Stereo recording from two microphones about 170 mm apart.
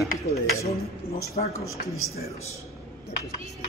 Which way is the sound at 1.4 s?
50° left (ahead or behind).